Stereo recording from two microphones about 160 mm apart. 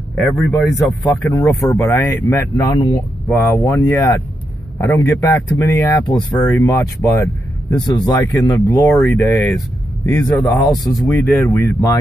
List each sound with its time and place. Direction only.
0.1 s speech: centre (ahead or behind)
0.5 s speech: 20° left (ahead or behind)